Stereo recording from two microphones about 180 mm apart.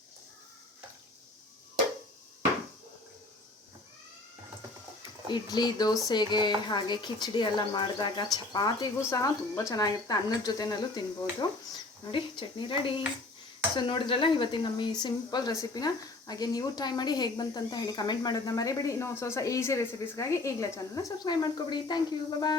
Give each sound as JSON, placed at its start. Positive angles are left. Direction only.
{"t": 5.3, "sound": "speech", "side_deg": 25}